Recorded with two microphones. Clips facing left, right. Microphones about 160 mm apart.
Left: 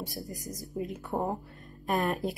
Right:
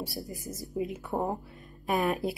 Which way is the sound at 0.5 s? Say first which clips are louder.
Right 3 dB; centre (ahead or behind).